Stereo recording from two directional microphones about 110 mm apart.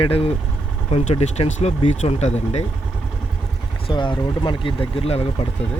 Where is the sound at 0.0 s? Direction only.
60° left (ahead or behind).